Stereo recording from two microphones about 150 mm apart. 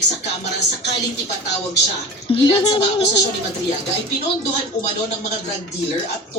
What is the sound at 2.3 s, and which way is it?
Speech, 35° left (ahead or behind).